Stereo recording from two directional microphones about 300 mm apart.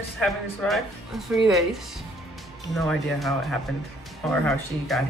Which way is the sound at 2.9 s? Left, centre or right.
Centre.